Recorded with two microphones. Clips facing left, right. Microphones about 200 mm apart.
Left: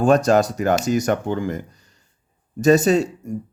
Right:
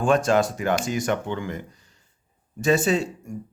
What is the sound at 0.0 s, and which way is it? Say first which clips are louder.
Speech: left 4 dB; 40° left (ahead or behind).